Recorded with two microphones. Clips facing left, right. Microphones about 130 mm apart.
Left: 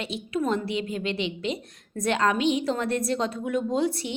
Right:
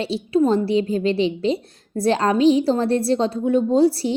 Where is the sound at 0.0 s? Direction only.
30° right (ahead or behind).